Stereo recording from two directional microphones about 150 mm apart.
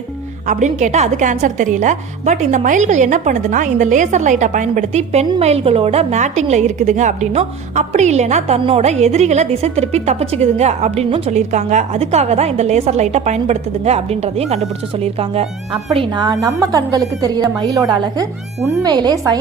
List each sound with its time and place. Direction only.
0.4 s a woman's voice: 55° right (ahead or behind)
16.0 s a woman's voice: 30° right (ahead or behind)